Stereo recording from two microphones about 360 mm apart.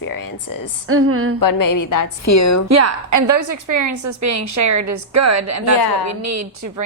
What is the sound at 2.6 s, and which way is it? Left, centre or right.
A woman's voice, right.